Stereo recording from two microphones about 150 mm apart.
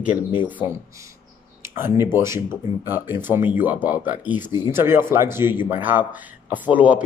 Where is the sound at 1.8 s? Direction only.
15° right (ahead or behind).